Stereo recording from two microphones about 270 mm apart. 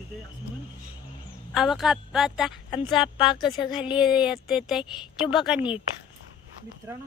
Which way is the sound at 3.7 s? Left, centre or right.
Centre.